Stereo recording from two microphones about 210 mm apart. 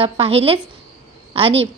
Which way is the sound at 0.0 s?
30° right (ahead or behind).